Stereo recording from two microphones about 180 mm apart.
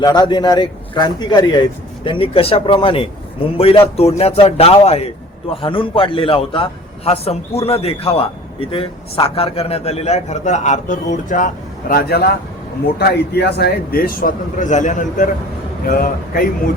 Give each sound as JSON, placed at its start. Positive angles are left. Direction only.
{"t": 0.0, "sound": "a man's voice", "side_deg": 20}
{"t": 15.8, "sound": "a man's voice", "side_deg": 55}